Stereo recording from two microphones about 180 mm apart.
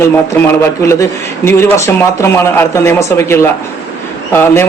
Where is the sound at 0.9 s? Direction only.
15° left (ahead or behind).